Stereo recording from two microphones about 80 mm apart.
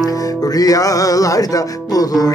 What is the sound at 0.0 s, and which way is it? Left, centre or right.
Music, left.